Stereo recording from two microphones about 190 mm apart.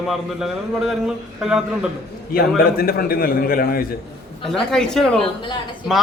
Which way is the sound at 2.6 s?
50° left (ahead or behind).